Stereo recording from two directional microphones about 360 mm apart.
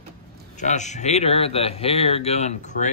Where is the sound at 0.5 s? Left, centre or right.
Centre.